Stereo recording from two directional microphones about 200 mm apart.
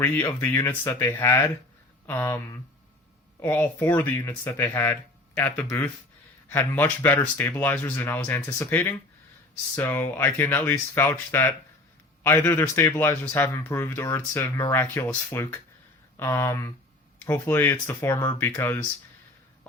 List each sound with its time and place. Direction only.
0.0 s speech: 15° left (ahead or behind)